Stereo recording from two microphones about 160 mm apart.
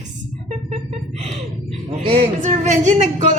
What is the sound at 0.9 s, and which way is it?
Speech, 45° right (ahead or behind).